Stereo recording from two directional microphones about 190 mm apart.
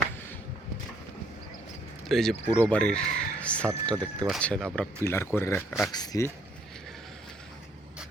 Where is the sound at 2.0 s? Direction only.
Centre (ahead or behind).